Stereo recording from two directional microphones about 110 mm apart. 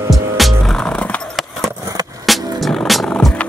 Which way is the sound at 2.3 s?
Centre (ahead or behind).